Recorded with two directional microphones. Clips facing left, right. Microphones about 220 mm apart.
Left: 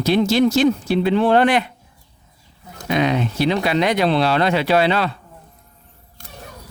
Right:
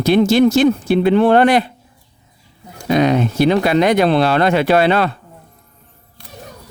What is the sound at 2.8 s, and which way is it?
Speech, 40° right (ahead or behind).